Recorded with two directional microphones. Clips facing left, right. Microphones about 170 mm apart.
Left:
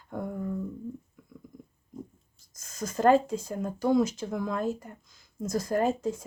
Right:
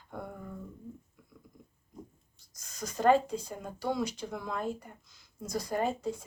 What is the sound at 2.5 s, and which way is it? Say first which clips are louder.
Speech: left 5 dB; 50° left (ahead or behind).